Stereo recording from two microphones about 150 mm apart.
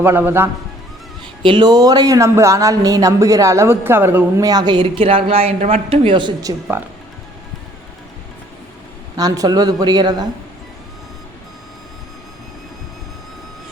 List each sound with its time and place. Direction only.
0.0 s a man's voice: 15° right (ahead or behind)
1.4 s speech: 35° right (ahead or behind); by 4.4 s 15° right (ahead or behind)
4.4 s speech: 30° right (ahead or behind)
9.1 s speech: 25° right (ahead or behind)